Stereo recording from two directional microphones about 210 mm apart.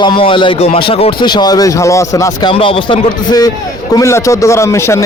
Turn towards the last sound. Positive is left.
turn(degrees=10)  # may be behind; listen again after turning